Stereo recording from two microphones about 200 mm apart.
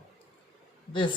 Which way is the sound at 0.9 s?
25° left (ahead or behind).